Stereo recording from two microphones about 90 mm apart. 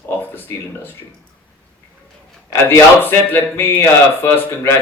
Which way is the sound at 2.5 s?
25° left (ahead or behind).